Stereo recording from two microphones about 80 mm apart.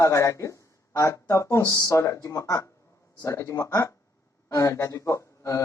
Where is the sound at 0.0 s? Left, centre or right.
Left.